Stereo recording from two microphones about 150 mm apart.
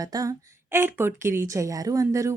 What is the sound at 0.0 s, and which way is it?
Speech, 25° right (ahead or behind).